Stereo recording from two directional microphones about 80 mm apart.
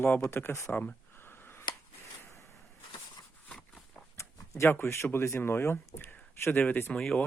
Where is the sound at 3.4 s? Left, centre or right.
Centre.